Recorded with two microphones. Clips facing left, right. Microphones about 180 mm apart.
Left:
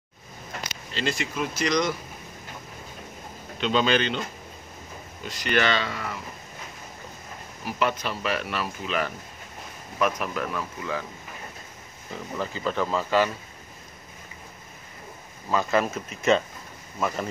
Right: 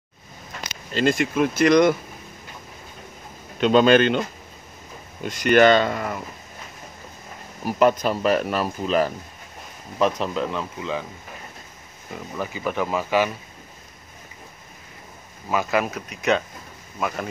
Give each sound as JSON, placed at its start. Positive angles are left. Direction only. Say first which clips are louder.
{"t": 0.9, "sound": "speech", "louder": "right 8 dB", "side_deg": -50}
{"t": 3.6, "sound": "speech", "louder": "right 8 dB", "side_deg": -50}
{"t": 5.2, "sound": "speech", "louder": "right 9 dB", "side_deg": -50}
{"t": 7.6, "sound": "speech", "louder": "right 8 dB", "side_deg": -45}
{"t": 12.1, "sound": "speech", "louder": "right 1 dB", "side_deg": -10}
{"t": 15.5, "sound": "speech", "louder": "right 1 dB", "side_deg": -5}